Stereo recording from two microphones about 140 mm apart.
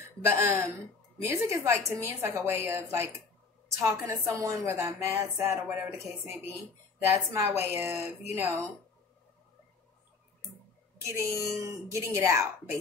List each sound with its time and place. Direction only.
0.3 s a woman's voice: 20° right (ahead or behind)
7.1 s a woman's voice: 15° right (ahead or behind)
11.1 s a woman's voice: 20° right (ahead or behind)